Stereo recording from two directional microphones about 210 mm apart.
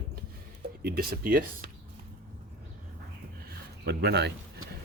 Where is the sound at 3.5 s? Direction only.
50° right (ahead or behind).